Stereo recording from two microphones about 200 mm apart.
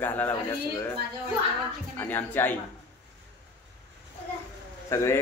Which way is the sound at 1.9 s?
10° left (ahead or behind).